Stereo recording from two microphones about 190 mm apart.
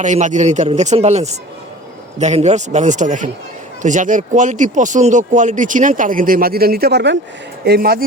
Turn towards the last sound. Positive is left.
turn(degrees=-55)  # may be behind; listen again after turning